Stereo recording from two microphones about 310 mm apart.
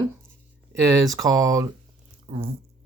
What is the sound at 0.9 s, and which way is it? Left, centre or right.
Speech, centre.